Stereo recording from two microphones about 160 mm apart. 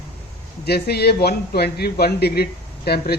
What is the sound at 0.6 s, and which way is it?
A man's voice, 85° left.